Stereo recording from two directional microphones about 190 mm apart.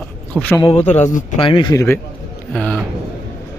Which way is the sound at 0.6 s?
30° left (ahead or behind).